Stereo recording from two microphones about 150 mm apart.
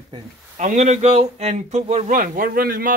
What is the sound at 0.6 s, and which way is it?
Speech, 50° right (ahead or behind).